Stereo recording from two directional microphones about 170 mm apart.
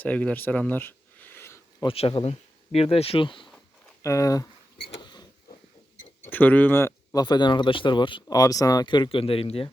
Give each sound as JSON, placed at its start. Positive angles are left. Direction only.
{"t": 0.0, "sound": "a sound", "side_deg": 10}
{"t": 1.8, "sound": "speech", "side_deg": 35}
{"t": 4.0, "sound": "speech", "side_deg": 20}
{"t": 4.9, "sound": "rodents", "side_deg": 25}
{"t": 6.2, "sound": "speech", "side_deg": 10}